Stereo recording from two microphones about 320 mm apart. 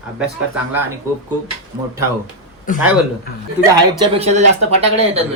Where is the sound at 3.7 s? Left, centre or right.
Centre.